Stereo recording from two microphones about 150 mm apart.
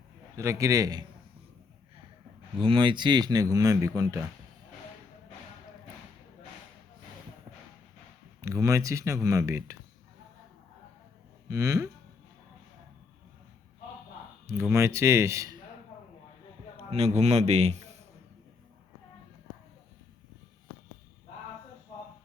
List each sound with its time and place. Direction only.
0.3 s speech: 20° right (ahead or behind)
2.6 s speech: 35° right (ahead or behind)
8.4 s speech: 20° right (ahead or behind)
11.4 s speech: 20° right (ahead or behind)
14.4 s speech: 20° right (ahead or behind)
16.9 s a man's voice: 45° right (ahead or behind)